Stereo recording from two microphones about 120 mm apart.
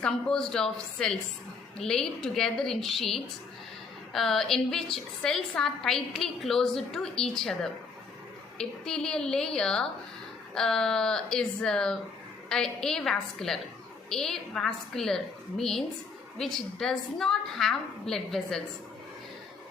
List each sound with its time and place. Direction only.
0.0 s a woman's voice: 5° left (ahead or behind)